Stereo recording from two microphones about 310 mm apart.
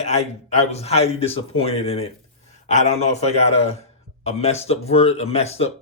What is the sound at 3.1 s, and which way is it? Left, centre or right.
Speech, left.